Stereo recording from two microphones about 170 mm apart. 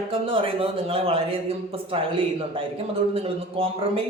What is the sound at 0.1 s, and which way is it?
Speech, 30° right (ahead or behind).